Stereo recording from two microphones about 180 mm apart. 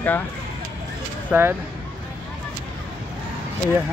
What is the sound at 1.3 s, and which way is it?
Speech, 10° right (ahead or behind).